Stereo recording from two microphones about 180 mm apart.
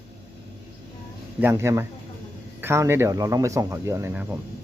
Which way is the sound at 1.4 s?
15° right (ahead or behind).